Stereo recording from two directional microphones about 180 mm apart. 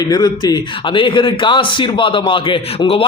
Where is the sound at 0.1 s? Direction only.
20° left (ahead or behind).